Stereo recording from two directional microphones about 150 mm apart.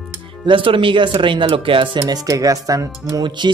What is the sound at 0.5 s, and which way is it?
Speech, 35° right (ahead or behind).